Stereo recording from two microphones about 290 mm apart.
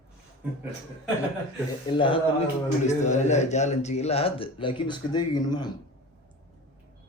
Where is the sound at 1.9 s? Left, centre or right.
Centre.